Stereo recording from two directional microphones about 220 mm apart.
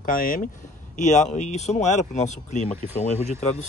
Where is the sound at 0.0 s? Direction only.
35° left (ahead or behind).